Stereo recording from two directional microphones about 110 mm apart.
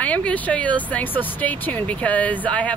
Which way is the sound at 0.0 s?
15° left (ahead or behind).